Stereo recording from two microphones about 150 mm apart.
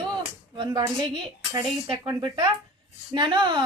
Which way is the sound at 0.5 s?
30° right (ahead or behind).